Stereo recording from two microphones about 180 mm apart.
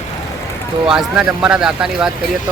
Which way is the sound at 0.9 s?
5° right (ahead or behind).